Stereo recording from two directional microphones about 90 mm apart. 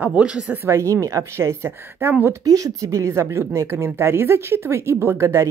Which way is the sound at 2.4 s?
40° right (ahead or behind).